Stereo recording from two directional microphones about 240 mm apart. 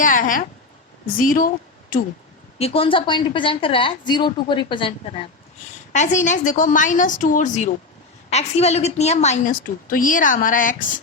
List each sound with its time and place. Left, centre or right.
0.0 s a woman's voice: left
2.6 s a woman's voice: left